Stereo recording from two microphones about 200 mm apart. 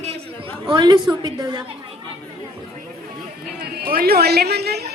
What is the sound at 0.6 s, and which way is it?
A woman's voice, 25° right (ahead or behind).